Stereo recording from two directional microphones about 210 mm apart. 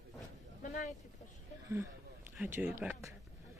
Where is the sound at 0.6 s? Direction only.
35° left (ahead or behind).